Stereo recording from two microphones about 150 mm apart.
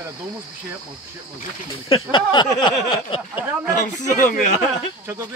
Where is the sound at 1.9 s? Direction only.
30° left (ahead or behind).